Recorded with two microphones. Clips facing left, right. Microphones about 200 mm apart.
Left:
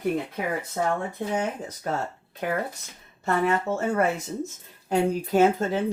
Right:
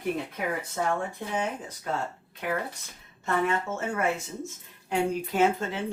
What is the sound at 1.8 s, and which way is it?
Speech, 45° left (ahead or behind).